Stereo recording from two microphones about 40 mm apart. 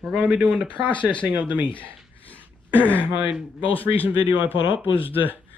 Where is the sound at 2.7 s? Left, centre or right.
Left.